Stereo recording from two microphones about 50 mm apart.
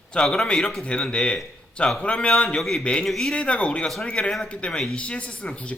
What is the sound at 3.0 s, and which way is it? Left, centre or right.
Speech, centre.